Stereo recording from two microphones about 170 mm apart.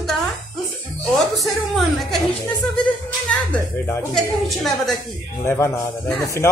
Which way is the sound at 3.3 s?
5° left (ahead or behind).